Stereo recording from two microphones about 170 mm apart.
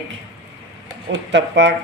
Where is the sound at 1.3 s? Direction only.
90° right.